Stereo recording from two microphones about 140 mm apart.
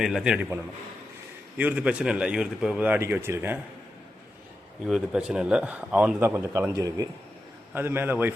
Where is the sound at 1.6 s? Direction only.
10° right (ahead or behind).